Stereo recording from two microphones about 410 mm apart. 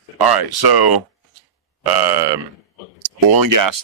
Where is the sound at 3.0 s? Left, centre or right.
Right.